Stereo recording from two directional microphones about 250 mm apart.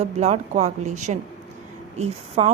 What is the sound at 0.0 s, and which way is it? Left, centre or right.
A woman's voice, right.